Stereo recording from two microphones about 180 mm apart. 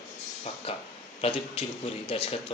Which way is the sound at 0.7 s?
30° left (ahead or behind).